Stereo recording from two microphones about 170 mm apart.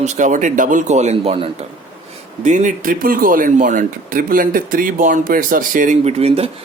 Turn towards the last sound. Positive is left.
turn(degrees=-35)  # may be behind; listen again after turning